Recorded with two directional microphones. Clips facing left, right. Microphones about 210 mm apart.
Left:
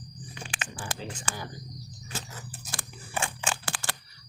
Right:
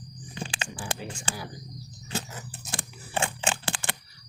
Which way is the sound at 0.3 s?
30° right (ahead or behind).